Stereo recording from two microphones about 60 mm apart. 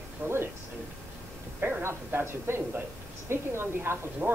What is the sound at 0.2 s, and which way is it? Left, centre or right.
Speech, right.